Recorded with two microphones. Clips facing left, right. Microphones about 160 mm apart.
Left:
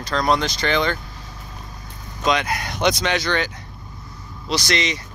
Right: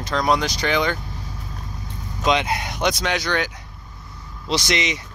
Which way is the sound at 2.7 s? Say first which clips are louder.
Left 3 dB; 5° right (ahead or behind).